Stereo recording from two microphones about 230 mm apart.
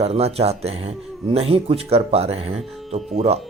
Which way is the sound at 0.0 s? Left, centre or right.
Right.